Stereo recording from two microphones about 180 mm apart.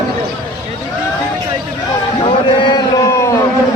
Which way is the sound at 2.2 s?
25° left (ahead or behind).